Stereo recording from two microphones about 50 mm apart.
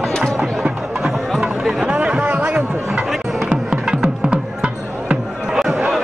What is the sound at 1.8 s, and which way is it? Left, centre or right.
Chatter, right.